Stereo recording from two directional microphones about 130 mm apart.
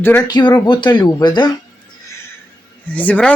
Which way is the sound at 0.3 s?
35° left (ahead or behind).